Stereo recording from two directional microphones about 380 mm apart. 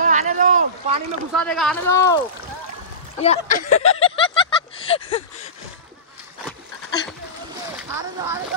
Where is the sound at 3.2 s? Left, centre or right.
Centre.